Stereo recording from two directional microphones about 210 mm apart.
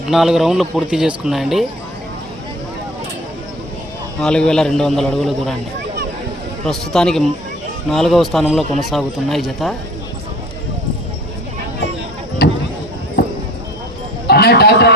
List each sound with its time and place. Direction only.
0.1 s speech: centre (ahead or behind)
4.2 s speech: 5° left (ahead or behind)
6.7 s speech: 5° left (ahead or behind)
12.4 s a sound: 45° left (ahead or behind)
14.3 s a man's voice: 50° left (ahead or behind)